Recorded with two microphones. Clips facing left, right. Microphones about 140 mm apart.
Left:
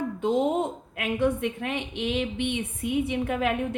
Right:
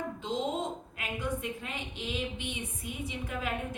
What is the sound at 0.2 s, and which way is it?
A woman's voice, 55° left (ahead or behind).